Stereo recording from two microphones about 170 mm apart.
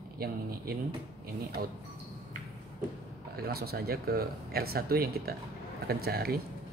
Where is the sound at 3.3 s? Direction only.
65° right (ahead or behind).